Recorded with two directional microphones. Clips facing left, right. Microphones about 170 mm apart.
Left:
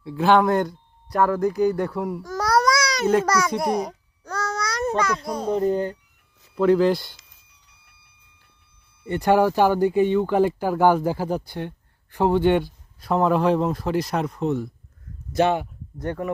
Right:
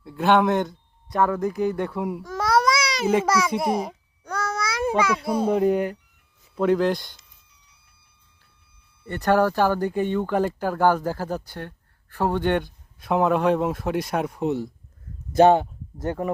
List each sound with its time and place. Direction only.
0.2 s speech: centre (ahead or behind)
2.2 s babbling: 25° right (ahead or behind)
2.9 s a child's voice: 5° right (ahead or behind)
6.6 s speech: centre (ahead or behind)
9.0 s speech: 15° left (ahead or behind)
13.0 s speech: centre (ahead or behind)
16.0 s speech: 25° right (ahead or behind)